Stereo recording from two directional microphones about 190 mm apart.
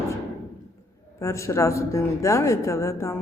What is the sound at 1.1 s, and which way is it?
Speech, 15° left (ahead or behind).